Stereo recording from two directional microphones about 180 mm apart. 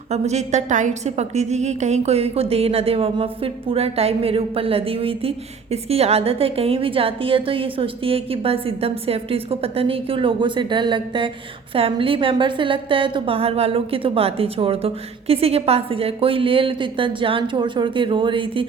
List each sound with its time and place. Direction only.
0.1 s a woman's voice: 40° right (ahead or behind)